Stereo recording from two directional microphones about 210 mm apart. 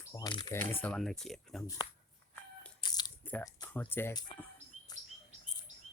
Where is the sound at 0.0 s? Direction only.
15° left (ahead or behind).